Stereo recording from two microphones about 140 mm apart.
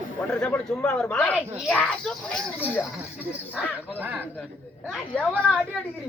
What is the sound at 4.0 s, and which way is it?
Speech, 10° right (ahead or behind).